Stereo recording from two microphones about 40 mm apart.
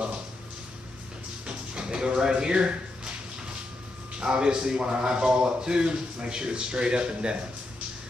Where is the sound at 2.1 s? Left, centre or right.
Centre.